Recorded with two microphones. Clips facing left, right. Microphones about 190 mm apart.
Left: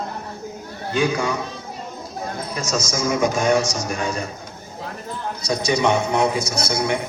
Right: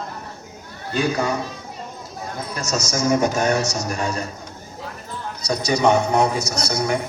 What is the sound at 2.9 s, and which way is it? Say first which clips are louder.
A man's voice: right 2 dB; 40° right (ahead or behind).